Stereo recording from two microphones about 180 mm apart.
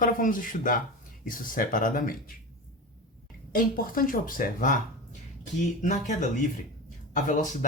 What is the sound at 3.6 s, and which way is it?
Speech, 50° left (ahead or behind).